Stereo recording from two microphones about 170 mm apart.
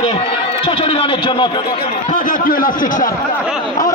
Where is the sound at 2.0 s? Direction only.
50° left (ahead or behind).